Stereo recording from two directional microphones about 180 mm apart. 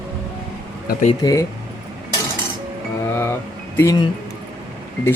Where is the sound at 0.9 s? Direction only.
40° left (ahead or behind).